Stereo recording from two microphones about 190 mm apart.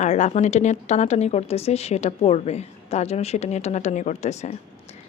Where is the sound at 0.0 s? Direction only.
40° left (ahead or behind).